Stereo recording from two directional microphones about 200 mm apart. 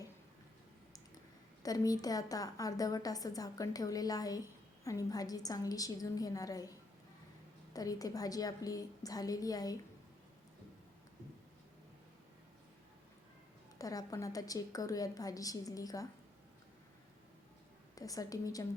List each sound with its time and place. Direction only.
1.6 s a woman's voice: 20° left (ahead or behind)
13.7 s a woman's voice: 15° left (ahead or behind)
17.9 s a woman's voice: 15° left (ahead or behind)